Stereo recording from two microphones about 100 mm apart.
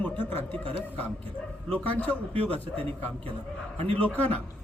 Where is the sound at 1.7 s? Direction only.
15° left (ahead or behind).